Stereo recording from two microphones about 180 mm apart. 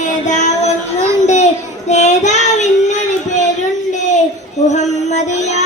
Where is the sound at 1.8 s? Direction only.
40° left (ahead or behind).